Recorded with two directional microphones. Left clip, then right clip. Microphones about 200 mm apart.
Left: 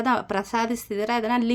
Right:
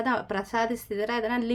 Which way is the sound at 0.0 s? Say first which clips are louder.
Left 4 dB; 30° left (ahead or behind).